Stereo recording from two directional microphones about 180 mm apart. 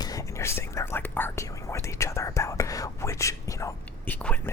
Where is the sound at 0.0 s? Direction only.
20° left (ahead or behind).